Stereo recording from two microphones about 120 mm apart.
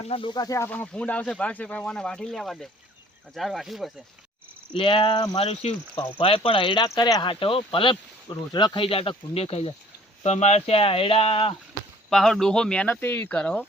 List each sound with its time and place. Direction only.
0.0 s speech: 50° left (ahead or behind)
0.3 s speech: 30° left (ahead or behind)
0.7 s speech: 10° left (ahead or behind)
4.7 s speech: 45° left (ahead or behind)
5.4 s speech: 60° left (ahead or behind)
6.8 s speech: 30° left (ahead or behind); by 9.7 s 55° left (ahead or behind)
10.2 s speech: 70° left (ahead or behind); by 11.5 s 50° left (ahead or behind)
12.1 s speech: 5° left (ahead or behind)